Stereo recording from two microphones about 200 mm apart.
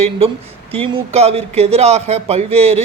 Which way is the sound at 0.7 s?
25° right (ahead or behind).